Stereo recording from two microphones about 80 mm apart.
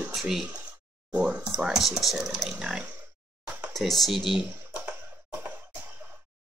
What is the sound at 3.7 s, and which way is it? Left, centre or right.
Speech, centre.